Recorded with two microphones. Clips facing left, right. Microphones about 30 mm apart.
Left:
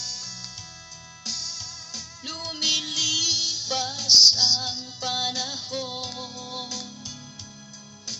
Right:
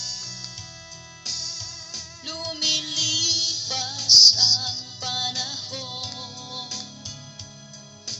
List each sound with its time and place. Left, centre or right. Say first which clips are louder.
0.0 s music: right 1 dB; right